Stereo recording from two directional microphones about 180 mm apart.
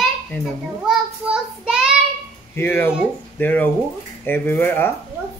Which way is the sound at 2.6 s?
10° left (ahead or behind).